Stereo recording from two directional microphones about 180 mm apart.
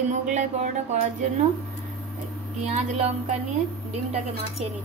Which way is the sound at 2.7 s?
40° right (ahead or behind).